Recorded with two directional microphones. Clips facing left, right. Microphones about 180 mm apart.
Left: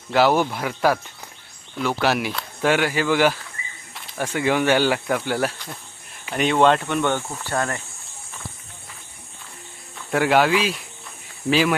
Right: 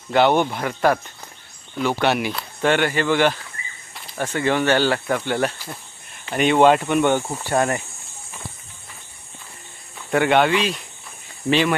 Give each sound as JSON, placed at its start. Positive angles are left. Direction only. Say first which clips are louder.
{"t": 0.1, "sound": "speech", "louder": "right 1 dB", "side_deg": 0}
{"t": 10.1, "sound": "speech", "louder": "right 1 dB", "side_deg": 0}